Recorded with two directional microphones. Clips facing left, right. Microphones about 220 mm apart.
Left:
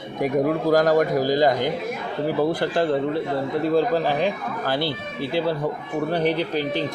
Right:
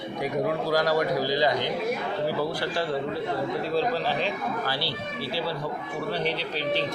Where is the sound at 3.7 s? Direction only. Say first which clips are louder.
Left 6 dB; 50° left (ahead or behind).